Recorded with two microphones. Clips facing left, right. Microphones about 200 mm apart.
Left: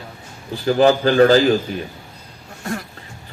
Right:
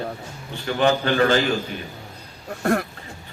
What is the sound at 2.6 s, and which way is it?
Speech, 60° right (ahead or behind).